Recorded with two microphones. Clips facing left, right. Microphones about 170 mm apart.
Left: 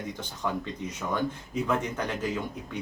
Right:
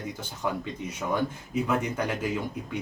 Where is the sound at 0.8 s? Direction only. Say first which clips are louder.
Right 2 dB; 10° right (ahead or behind).